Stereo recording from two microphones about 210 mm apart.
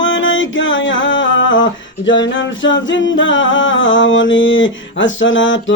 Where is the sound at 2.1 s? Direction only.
60° left (ahead or behind).